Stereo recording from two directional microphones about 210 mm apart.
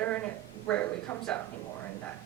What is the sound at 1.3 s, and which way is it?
Speech, 5° left (ahead or behind).